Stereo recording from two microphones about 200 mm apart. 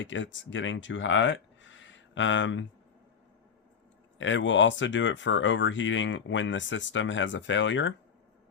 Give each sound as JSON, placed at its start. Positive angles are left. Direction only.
{"t": 0.0, "sound": "speech", "side_deg": 70}
{"t": 4.2, "sound": "speech", "side_deg": 70}